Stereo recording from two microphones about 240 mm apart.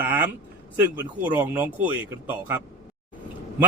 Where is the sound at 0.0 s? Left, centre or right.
Centre.